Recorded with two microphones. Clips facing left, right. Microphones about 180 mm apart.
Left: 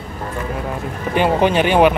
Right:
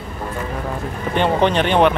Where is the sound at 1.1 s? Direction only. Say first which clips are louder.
Left 2 dB; 5° left (ahead or behind).